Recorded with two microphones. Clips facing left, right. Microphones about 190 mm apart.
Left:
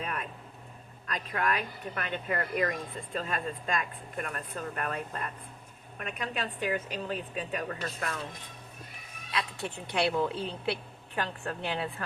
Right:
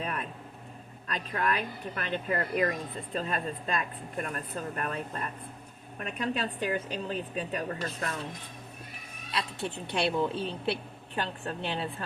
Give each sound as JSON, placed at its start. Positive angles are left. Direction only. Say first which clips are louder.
{"t": 0.0, "sound": "a sound", "louder": "right 1 dB", "side_deg": -35}
{"t": 1.0, "sound": "a woman's voice", "louder": "even", "side_deg": -30}
{"t": 9.3, "sound": "speech", "louder": "right 1 dB", "side_deg": -30}